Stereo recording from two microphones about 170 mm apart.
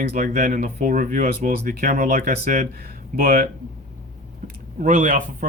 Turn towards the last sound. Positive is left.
turn(degrees=-45)  # may be behind; listen again after turning